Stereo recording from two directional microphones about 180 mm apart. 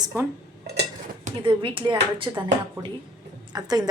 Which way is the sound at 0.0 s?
15° right (ahead or behind).